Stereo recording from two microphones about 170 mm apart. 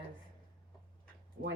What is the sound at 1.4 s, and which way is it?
Speech, 90° right.